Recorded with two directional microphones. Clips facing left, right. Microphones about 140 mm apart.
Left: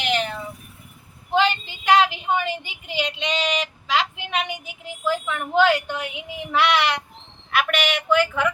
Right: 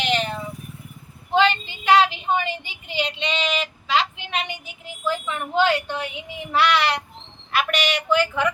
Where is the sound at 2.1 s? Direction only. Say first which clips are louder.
Even; 10° left (ahead or behind).